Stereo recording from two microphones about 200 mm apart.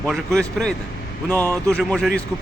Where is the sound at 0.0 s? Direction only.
5° left (ahead or behind).